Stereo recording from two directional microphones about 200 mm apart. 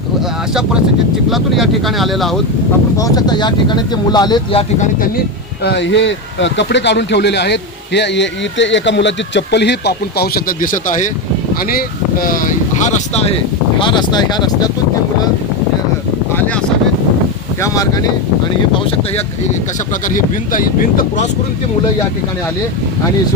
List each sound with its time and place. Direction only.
1.3 s speech: centre (ahead or behind)
3.0 s speech: 20° left (ahead or behind)
5.6 s speech: 60° left (ahead or behind); by 11.1 s 40° left (ahead or behind)
12.2 s speech: 45° left (ahead or behind); by 14.7 s 20° left (ahead or behind)
20.1 s speech: 40° left (ahead or behind)